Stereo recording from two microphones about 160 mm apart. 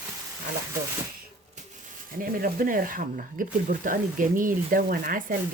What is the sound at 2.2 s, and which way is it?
Speech, 60° right (ahead or behind).